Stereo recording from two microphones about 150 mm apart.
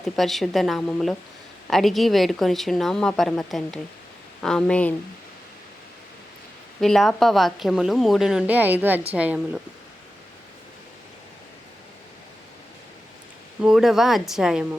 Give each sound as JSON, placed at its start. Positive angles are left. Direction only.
{"t": 0.0, "sound": "a woman's voice", "side_deg": 0}
{"t": 6.7, "sound": "a woman's voice", "side_deg": 5}
{"t": 13.6, "sound": "a woman's voice", "side_deg": -5}